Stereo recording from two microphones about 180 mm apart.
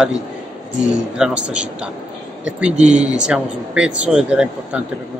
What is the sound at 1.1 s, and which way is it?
Speech, 5° right (ahead or behind).